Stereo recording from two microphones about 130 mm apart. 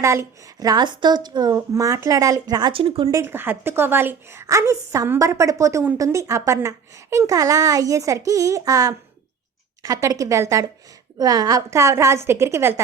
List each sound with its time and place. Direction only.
0.0 s a woman's voice: 20° right (ahead or behind); by 3.1 s 45° right (ahead or behind)
3.1 s a woman's voice: 20° right (ahead or behind)